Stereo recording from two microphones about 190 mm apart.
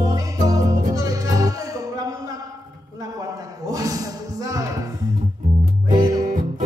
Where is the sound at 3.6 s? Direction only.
20° right (ahead or behind).